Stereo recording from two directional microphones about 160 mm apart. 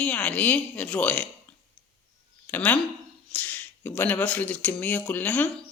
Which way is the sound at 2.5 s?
10° left (ahead or behind).